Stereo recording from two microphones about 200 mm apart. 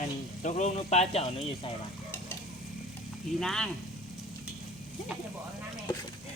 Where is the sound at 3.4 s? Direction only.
Centre (ahead or behind).